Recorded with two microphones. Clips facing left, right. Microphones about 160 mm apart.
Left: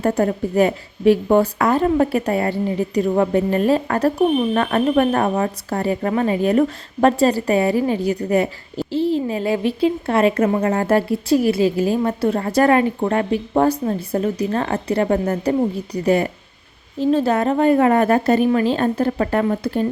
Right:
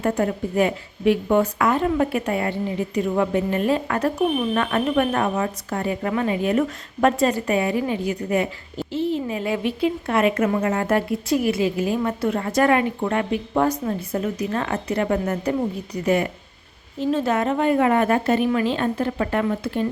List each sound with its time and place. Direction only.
0.0 s speech: 35° left (ahead or behind)